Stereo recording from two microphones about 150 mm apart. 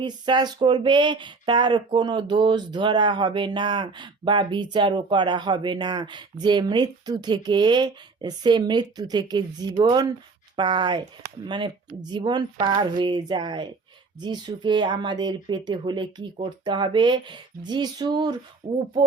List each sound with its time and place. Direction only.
0.0 s speech: 30° right (ahead or behind)